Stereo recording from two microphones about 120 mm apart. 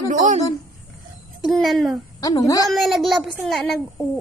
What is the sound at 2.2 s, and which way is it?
Speech, 30° left (ahead or behind).